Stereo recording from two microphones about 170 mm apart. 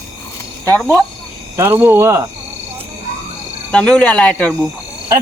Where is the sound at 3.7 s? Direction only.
5° left (ahead or behind).